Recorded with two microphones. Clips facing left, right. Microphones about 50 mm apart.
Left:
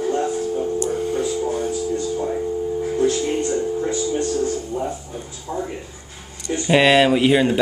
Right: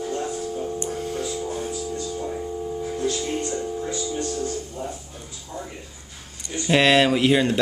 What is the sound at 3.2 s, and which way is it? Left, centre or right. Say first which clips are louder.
Music: left 6 dB; centre.